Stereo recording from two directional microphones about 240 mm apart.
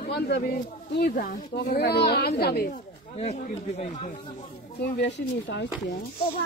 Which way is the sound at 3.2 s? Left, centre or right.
Left.